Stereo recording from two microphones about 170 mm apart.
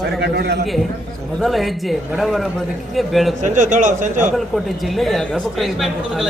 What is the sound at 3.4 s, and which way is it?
Speech, 50° right (ahead or behind).